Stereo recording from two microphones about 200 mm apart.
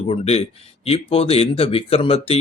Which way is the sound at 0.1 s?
30° left (ahead or behind).